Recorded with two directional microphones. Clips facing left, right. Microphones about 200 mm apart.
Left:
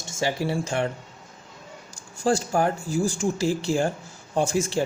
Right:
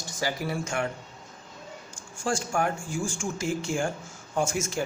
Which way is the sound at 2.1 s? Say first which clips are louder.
Left 5 dB; 35° left (ahead or behind).